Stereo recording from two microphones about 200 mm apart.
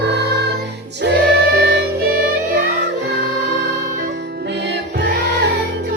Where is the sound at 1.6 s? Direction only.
55° right (ahead or behind).